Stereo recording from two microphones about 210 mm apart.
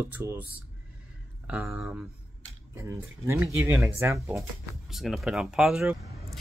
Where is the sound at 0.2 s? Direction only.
10° right (ahead or behind).